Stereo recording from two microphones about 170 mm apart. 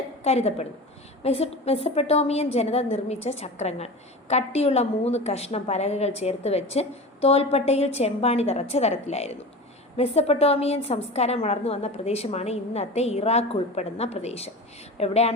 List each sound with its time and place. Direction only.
0.3 s a woman's voice: 40° left (ahead or behind)